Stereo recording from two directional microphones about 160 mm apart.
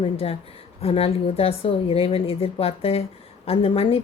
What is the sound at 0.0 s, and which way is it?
Speech, 35° left (ahead or behind).